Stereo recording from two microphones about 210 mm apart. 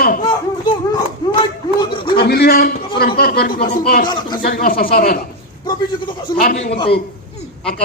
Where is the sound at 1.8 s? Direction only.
25° left (ahead or behind).